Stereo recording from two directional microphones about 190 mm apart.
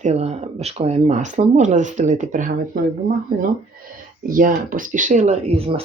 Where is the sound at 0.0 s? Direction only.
35° right (ahead or behind).